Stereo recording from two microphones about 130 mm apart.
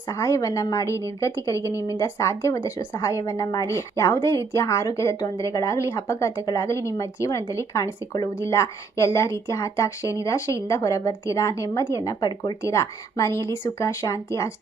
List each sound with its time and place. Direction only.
0.1 s a woman's voice: 25° left (ahead or behind)